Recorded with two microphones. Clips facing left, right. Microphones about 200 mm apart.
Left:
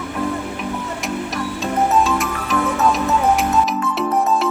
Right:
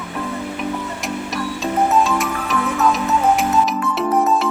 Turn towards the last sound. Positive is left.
turn(degrees=0)  # may be behind; listen again after turning